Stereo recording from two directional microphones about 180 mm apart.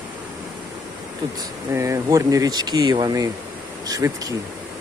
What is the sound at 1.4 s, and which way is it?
Speech, 20° right (ahead or behind).